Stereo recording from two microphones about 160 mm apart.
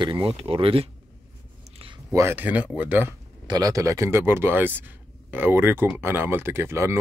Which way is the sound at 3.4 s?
25° right (ahead or behind).